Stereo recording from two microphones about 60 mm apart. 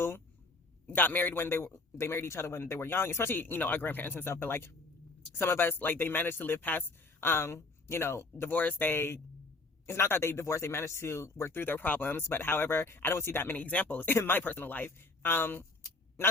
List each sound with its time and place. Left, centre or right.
0.9 s a man's voice: left
8.4 s a man's voice: left
11.5 s a man's voice: left